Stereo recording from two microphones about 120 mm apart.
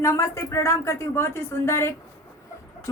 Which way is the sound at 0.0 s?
25° left (ahead or behind).